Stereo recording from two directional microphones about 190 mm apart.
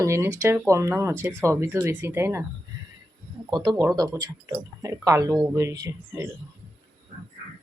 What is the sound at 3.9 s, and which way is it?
Speech, 20° right (ahead or behind).